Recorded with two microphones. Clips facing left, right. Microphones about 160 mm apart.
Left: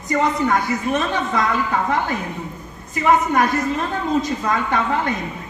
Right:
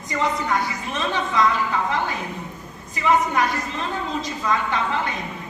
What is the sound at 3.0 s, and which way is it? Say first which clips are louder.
A woman's voice: left 3 dB; 50° left (ahead or behind).